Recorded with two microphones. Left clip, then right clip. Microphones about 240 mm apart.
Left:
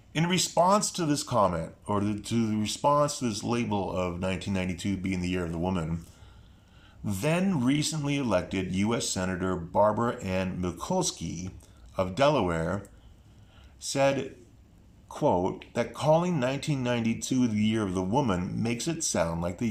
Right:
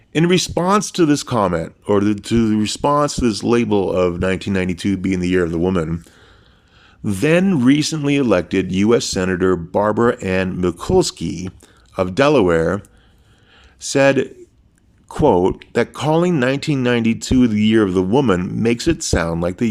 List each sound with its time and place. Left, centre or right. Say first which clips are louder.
0.1 s speech: right 11 dB; right
7.0 s speech: right 13 dB; right
13.8 s speech: right 12 dB; right